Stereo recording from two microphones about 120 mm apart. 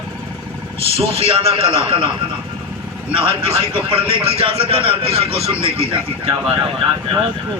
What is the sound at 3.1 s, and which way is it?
A man's voice, 50° right (ahead or behind).